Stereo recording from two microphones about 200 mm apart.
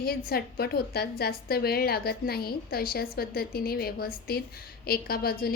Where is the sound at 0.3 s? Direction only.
50° left (ahead or behind).